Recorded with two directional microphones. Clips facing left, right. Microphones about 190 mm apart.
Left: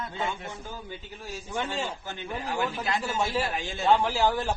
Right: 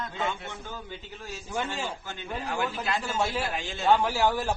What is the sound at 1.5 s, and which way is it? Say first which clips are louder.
Speech: left 1 dB; 5° right (ahead or behind).